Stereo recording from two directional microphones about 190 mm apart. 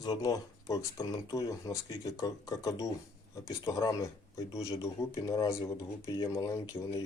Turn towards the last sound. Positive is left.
turn(degrees=20)  # may be behind; listen again after turning